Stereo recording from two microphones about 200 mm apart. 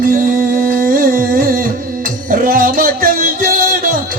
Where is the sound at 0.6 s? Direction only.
45° right (ahead or behind).